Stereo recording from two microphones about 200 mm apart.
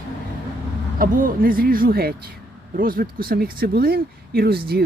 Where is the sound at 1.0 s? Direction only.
45° right (ahead or behind).